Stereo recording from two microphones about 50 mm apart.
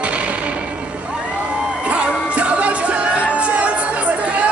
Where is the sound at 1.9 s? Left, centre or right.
Right.